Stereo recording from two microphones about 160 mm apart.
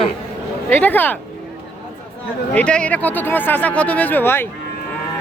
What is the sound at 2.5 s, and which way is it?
Speech, 5° left (ahead or behind).